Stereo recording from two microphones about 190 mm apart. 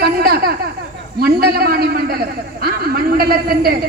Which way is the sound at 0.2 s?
50° right (ahead or behind).